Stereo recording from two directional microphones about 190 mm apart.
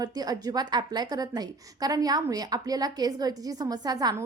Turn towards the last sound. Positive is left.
turn(degrees=-20)  # may be behind; listen again after turning